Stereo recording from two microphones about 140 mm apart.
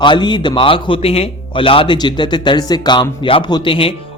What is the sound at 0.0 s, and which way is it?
A man's voice, 35° left (ahead or behind).